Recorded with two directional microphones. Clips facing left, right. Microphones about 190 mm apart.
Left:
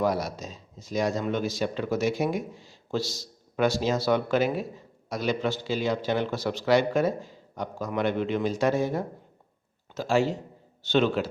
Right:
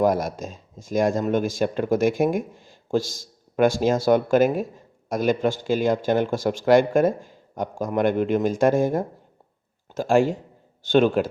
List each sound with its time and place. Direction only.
0.0 s speech: 50° right (ahead or behind)